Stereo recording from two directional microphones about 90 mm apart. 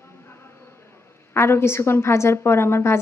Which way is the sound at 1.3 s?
30° left (ahead or behind).